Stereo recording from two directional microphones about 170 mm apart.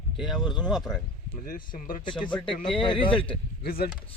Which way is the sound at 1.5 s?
55° left (ahead or behind).